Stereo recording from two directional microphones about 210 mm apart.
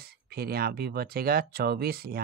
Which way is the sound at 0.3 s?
45° right (ahead or behind).